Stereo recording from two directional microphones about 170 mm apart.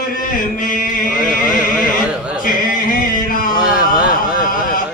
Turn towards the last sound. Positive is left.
turn(degrees=-5)  # may be behind; listen again after turning